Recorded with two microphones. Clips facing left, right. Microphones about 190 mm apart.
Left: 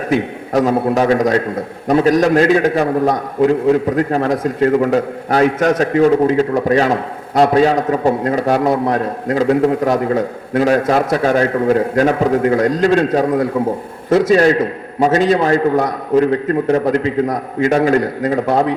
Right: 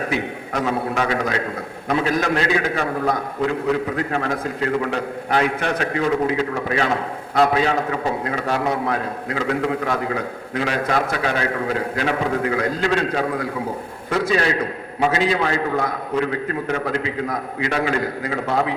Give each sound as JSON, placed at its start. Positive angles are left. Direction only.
{"t": 0.1, "sound": "a man's voice", "side_deg": 40}